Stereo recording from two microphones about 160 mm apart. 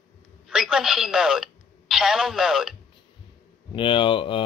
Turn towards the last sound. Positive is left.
turn(degrees=30)  # may be behind; listen again after turning